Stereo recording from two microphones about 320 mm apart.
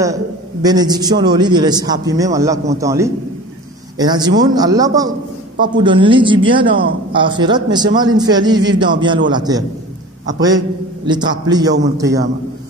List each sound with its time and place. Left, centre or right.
0.0 s a man's voice: centre